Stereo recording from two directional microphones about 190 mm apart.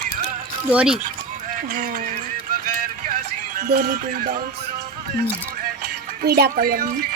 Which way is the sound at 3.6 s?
55° right (ahead or behind).